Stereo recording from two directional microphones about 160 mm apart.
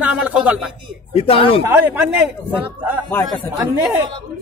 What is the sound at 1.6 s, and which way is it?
Speech, 10° right (ahead or behind).